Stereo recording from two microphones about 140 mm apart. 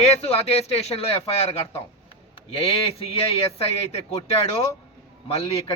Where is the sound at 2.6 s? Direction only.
45° left (ahead or behind).